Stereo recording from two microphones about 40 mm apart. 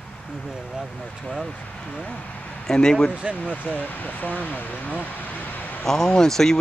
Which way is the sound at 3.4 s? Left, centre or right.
Left.